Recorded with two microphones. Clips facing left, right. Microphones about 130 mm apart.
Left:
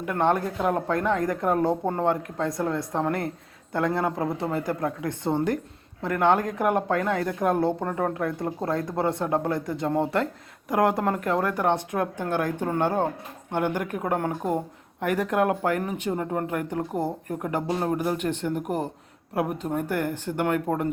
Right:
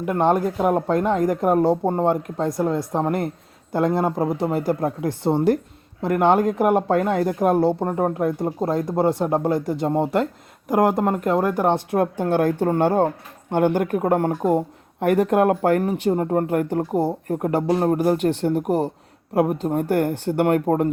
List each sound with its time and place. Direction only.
0.1 s speech: 20° right (ahead or behind)
6.6 s speech: 10° right (ahead or behind)
6.8 s speech: 25° right (ahead or behind)
11.9 s speech: 35° right (ahead or behind)